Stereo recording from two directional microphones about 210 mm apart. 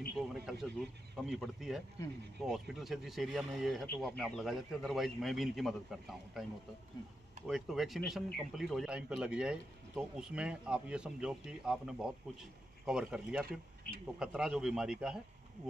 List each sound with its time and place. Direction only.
0.2 s speech: centre (ahead or behind)
7.4 s speech: centre (ahead or behind)
13.5 s speech: 45° right (ahead or behind)
14.2 s speech: 5° right (ahead or behind)